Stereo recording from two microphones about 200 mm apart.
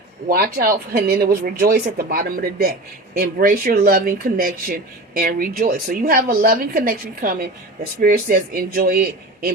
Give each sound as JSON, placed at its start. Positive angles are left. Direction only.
{"t": 0.3, "sound": "speech", "side_deg": -45}